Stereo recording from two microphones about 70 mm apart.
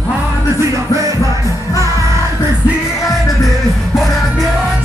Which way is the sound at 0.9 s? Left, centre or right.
Right.